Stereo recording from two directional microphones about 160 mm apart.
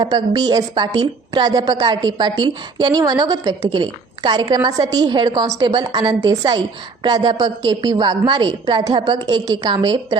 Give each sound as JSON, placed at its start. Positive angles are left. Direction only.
{"t": 0.0, "sound": "a woman's voice", "side_deg": -25}